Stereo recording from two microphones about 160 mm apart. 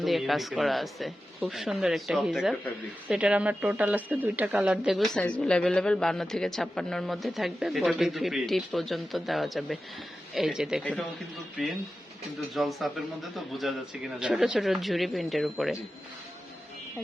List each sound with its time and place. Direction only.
0.0 s speech: centre (ahead or behind)
12.5 s speech: centre (ahead or behind)